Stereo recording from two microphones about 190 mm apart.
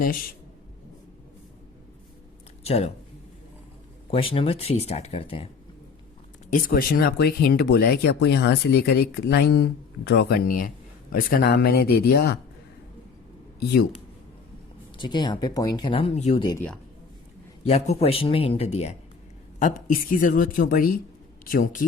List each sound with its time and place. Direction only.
2.6 s speech: 35° left (ahead or behind)
4.1 s speech: 30° left (ahead or behind)
6.5 s a woman's voice: 50° left (ahead or behind)
14.9 s speech: 25° left (ahead or behind)
17.7 s speech: 35° left (ahead or behind)
19.5 s a woman's voice: 45° left (ahead or behind)